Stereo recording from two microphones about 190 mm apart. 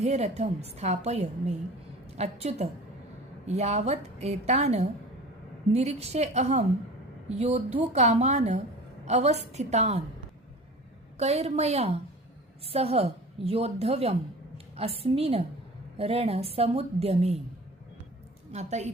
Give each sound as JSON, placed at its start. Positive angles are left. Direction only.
{"t": 0.0, "sound": "a woman's voice", "side_deg": -35}
{"t": 11.2, "sound": "a woman's voice", "side_deg": -35}
{"t": 18.5, "sound": "a woman's voice", "side_deg": -35}